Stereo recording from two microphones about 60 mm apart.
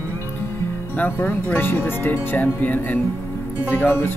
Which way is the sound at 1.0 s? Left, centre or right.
Left.